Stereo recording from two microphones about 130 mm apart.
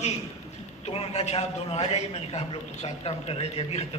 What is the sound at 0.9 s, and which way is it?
A man's voice, 55° left (ahead or behind).